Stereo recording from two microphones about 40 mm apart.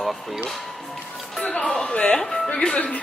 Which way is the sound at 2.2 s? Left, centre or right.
Centre.